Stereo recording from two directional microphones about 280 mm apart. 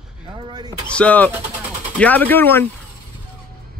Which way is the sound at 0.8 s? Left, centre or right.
Centre.